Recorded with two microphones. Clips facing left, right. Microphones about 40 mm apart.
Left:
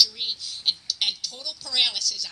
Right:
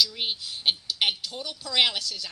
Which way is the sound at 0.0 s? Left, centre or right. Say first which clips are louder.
Left 1 dB; right.